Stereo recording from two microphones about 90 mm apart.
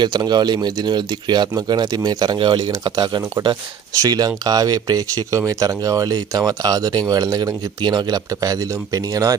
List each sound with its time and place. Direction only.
0.0 s speech: 55° right (ahead or behind)
3.9 s speech: 45° right (ahead or behind)